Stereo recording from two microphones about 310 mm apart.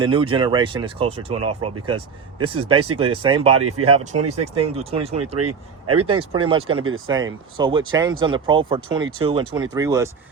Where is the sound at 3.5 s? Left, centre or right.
Right.